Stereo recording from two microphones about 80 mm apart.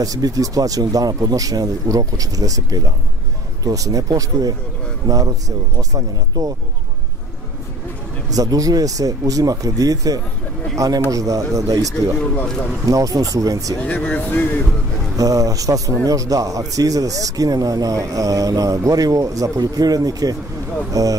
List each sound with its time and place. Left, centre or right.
0.0 s speech: right
8.3 s speech: right
13.7 s speech: centre
15.1 s speech: right